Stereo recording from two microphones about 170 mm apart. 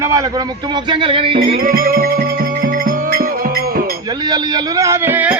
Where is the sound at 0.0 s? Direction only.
20° right (ahead or behind).